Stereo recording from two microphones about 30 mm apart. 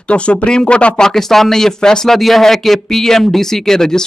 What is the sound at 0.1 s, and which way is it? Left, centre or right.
Speech, left.